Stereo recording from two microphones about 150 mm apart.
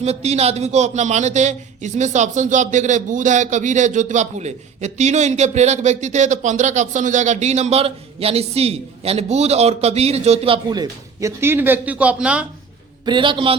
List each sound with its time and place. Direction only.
0.0 s a man's voice: 45° right (ahead or behind); by 12.5 s 5° right (ahead or behind)
13.1 s a man's voice: 35° right (ahead or behind)